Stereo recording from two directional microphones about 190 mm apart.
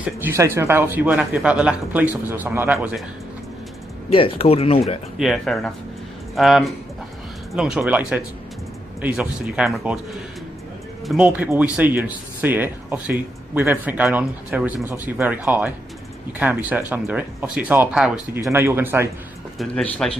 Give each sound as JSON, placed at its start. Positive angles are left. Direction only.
{"t": 0.2, "sound": "speech", "side_deg": -15}
{"t": 4.1, "sound": "speech", "side_deg": 30}
{"t": 5.1, "sound": "speech", "side_deg": 0}
{"t": 11.0, "sound": "speech", "side_deg": -5}
{"t": 19.5, "sound": "speech", "side_deg": 5}